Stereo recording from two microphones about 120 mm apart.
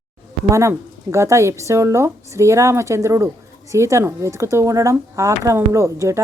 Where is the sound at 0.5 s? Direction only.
25° right (ahead or behind).